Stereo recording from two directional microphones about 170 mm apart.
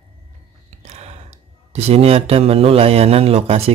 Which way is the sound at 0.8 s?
40° right (ahead or behind).